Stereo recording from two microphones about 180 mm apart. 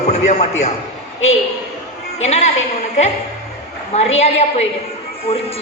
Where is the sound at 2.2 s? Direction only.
40° left (ahead or behind).